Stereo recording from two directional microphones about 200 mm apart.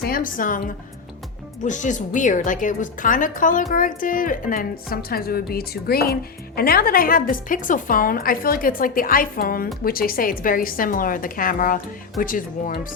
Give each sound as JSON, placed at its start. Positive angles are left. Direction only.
{"t": 0.0, "sound": "a woman's voice", "side_deg": 45}
{"t": 1.6, "sound": "a woman's voice", "side_deg": 40}